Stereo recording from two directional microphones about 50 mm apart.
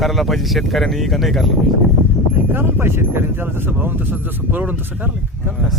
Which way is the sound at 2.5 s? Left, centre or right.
Right.